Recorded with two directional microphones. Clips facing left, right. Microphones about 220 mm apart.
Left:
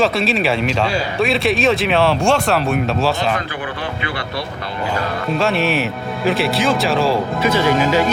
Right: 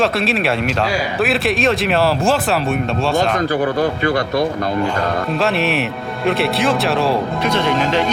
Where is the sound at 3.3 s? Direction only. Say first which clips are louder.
Right 8 dB; 40° right (ahead or behind).